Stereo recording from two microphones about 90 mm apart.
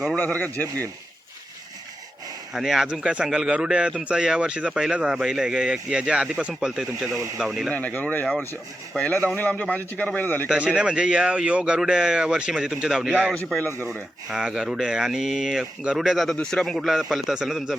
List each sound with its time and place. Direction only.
0.2 s speech: 20° left (ahead or behind)
2.5 s a man's voice: 5° right (ahead or behind)
7.7 s a man's voice: 15° left (ahead or behind)
10.5 s a man's voice: 10° right (ahead or behind)
13.6 s speech: 25° left (ahead or behind)
13.9 s speech: 5° right (ahead or behind)